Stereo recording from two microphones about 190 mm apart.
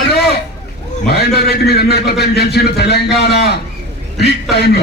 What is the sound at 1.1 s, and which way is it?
A man's voice, 60° left (ahead or behind).